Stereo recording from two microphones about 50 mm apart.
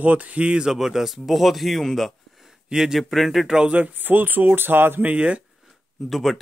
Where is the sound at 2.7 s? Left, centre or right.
Centre.